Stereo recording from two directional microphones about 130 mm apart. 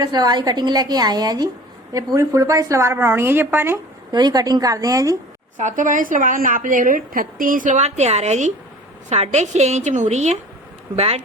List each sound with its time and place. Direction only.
0.0 s a woman's voice: 30° right (ahead or behind); by 3.8 s 15° right (ahead or behind)
4.1 s a woman's voice: 35° right (ahead or behind)
5.5 s a woman's voice: 80° right; by 11.2 s 55° right (ahead or behind)